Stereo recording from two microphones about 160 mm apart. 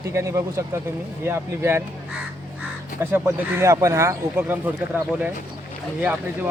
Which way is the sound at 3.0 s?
15° right (ahead or behind).